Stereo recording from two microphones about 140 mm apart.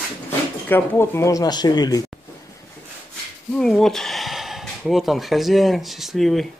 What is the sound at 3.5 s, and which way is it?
Speech, 5° left (ahead or behind).